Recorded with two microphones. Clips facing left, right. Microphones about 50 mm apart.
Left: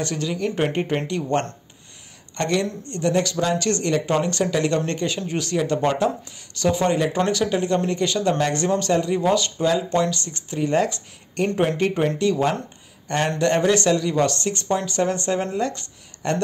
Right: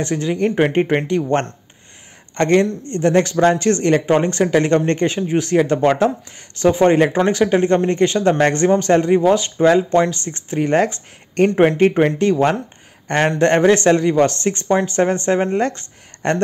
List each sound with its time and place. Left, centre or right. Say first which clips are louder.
0.0 s a woman's voice: right 6 dB; right
8.9 s speech: right 5 dB; right